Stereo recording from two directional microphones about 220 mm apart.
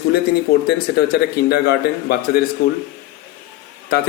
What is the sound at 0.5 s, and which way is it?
A man's voice, 40° left (ahead or behind).